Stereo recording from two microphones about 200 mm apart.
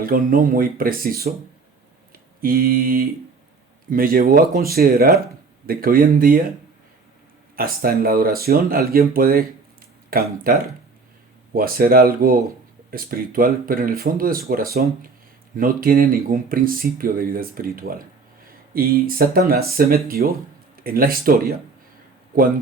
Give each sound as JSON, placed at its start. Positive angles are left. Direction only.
{"t": 0.0, "sound": "speech", "side_deg": -45}
{"t": 2.4, "sound": "speech", "side_deg": -45}
{"t": 7.5, "sound": "speech", "side_deg": -45}